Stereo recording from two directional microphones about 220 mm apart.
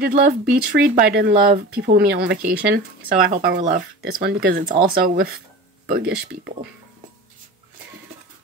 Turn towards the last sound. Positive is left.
turn(degrees=-45)  # may be behind; listen again after turning